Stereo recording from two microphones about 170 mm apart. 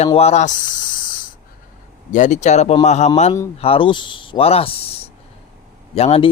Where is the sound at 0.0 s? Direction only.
40° left (ahead or behind).